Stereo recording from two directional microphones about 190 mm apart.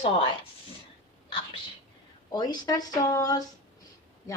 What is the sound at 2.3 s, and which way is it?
A woman's voice, 20° left (ahead or behind).